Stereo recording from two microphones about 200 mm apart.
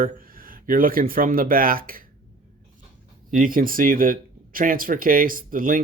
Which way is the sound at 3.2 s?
45° right (ahead or behind).